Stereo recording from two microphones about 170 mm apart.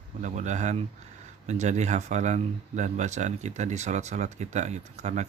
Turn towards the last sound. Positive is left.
turn(degrees=-40)  # may be behind; listen again after turning